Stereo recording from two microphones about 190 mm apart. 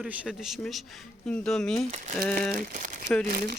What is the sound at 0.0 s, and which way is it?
Speech, 5° right (ahead or behind).